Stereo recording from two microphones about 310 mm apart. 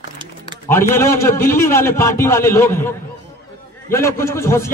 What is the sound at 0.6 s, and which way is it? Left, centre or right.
A man's voice, centre.